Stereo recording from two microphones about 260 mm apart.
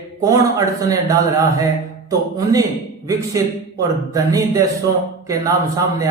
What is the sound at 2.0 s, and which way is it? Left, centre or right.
A man's voice, centre.